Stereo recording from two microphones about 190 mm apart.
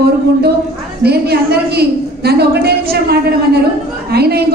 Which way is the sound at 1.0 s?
55° right (ahead or behind).